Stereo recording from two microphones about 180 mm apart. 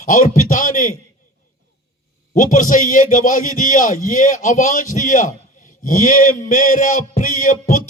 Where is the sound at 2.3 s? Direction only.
45° left (ahead or behind).